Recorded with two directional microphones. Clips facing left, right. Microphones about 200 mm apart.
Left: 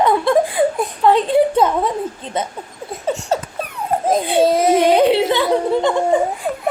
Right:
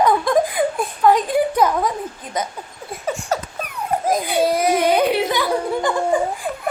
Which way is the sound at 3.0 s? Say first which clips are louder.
Left 3 dB; 25° left (ahead or behind).